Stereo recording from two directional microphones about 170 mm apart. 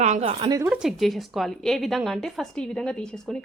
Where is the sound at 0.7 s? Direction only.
5° right (ahead or behind).